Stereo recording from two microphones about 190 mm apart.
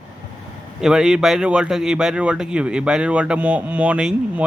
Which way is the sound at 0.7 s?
5° right (ahead or behind).